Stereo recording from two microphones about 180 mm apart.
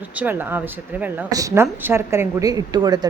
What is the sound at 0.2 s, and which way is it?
Speech, 10° right (ahead or behind).